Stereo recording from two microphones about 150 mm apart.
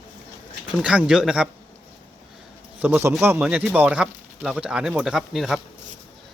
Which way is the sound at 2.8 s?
15° right (ahead or behind).